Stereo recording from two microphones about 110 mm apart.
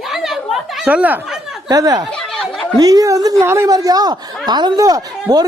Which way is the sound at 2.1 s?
10° left (ahead or behind).